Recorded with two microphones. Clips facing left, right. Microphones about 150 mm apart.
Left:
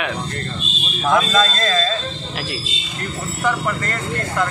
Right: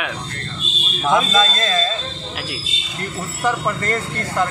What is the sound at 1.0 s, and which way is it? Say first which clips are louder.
Speech: even; 15° right (ahead or behind).